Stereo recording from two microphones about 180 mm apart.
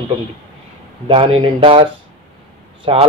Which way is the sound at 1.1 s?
30° right (ahead or behind).